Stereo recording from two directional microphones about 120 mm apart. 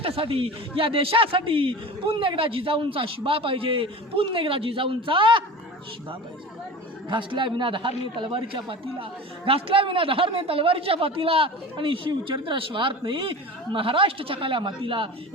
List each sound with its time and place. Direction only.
0.0 s a man's voice: 50° right (ahead or behind)
7.1 s a man's voice: 45° right (ahead or behind)